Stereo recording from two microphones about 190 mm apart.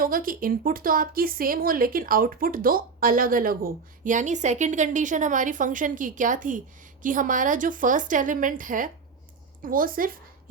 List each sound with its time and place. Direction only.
0.0 s speech: 50° right (ahead or behind)